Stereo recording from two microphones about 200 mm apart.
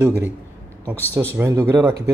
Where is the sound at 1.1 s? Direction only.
10° right (ahead or behind).